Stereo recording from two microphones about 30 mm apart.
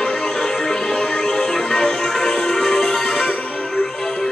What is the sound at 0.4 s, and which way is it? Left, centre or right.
Music, left.